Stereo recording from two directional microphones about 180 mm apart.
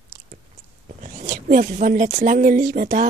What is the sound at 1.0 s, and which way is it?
A woman's voice, 45° right (ahead or behind).